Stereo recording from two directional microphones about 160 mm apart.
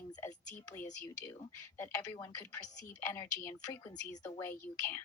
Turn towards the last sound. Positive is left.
turn(degrees=15)  # may be behind; listen again after turning